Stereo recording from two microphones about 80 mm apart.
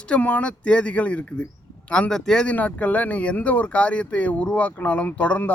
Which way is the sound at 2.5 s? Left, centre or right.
Centre.